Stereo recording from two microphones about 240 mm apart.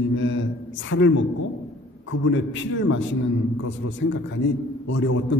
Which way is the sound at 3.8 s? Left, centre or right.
Left.